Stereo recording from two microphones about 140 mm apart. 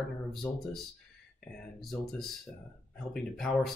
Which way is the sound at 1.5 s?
Centre (ahead or behind).